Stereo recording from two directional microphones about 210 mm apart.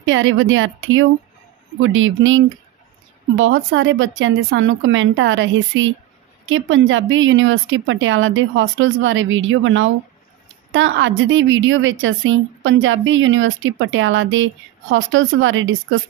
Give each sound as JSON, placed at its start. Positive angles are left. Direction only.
{"t": 0.0, "sound": "a woman's voice", "side_deg": -65}